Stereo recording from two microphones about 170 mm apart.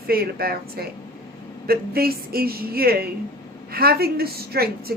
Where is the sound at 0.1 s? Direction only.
65° right (ahead or behind).